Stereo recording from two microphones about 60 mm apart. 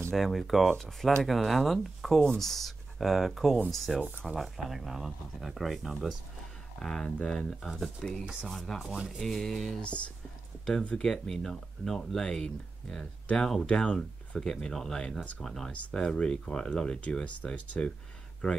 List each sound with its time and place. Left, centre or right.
0.1 s speech: centre
6.8 s speech: centre
8.9 s speech: centre
9.2 s speech: centre
9.8 s speech: centre